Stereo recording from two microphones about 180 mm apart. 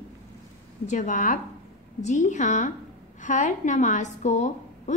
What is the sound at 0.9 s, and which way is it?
A woman's voice, 45° left (ahead or behind).